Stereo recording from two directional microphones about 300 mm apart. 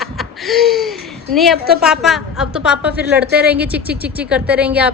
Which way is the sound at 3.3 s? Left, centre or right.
Centre.